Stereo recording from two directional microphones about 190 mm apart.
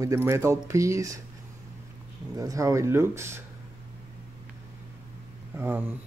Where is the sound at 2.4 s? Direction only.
15° right (ahead or behind).